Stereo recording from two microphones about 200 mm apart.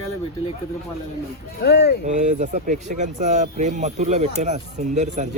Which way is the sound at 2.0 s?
35° right (ahead or behind).